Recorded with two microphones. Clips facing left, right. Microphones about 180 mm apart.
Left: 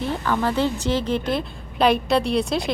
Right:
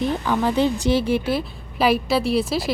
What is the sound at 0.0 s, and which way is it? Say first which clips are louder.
A woman's voice: right 2 dB; 15° right (ahead or behind).